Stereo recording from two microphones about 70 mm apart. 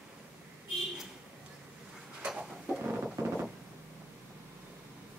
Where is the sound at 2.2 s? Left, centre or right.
Centre.